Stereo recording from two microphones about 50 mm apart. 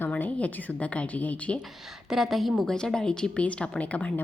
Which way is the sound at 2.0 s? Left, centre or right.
Centre.